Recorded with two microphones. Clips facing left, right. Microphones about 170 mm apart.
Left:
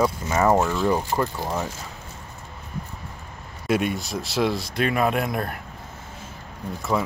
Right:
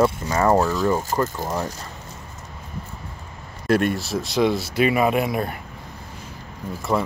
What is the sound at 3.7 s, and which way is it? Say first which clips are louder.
Speech: right 3 dB; centre (ahead or behind).